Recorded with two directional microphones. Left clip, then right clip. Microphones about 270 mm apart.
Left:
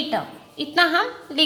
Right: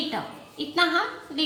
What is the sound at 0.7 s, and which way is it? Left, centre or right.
Speech, left.